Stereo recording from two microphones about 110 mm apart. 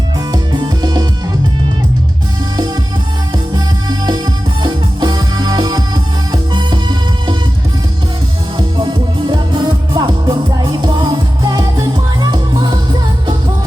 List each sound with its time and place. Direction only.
0.3 s music: 40° right (ahead or behind)
3.3 s music: 40° right (ahead or behind)
8.5 s music: 45° right (ahead or behind)